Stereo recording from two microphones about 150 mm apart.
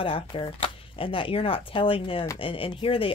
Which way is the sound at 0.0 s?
35° left (ahead or behind).